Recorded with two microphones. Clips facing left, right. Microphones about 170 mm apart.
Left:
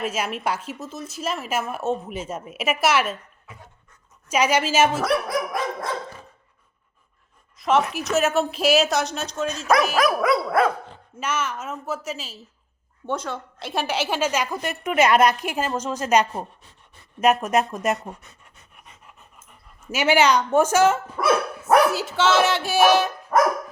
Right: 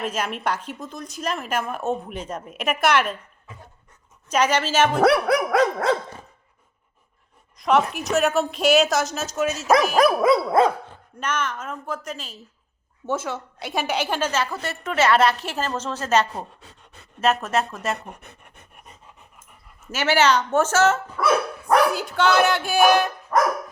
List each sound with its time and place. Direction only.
0.0 s speech: 5° left (ahead or behind)
4.3 s a woman's voice: 10° left (ahead or behind)
4.9 s dog: 75° right (ahead or behind)
7.5 s speech: centre (ahead or behind)
10.1 s dog: 25° right (ahead or behind)
11.2 s a woman's voice: 5° left (ahead or behind)
13.1 s a woman's voice: 5° right (ahead or behind); by 17.9 s 15° left (ahead or behind)
18.2 s pant: 60° right (ahead or behind)
19.9 s a woman's voice: 10° left (ahead or behind)